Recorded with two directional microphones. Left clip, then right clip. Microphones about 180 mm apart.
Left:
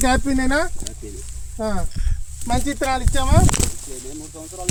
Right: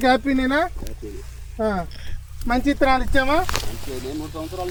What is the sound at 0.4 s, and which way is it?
Speech, 10° right (ahead or behind).